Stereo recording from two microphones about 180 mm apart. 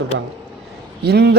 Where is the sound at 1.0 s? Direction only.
65° right (ahead or behind).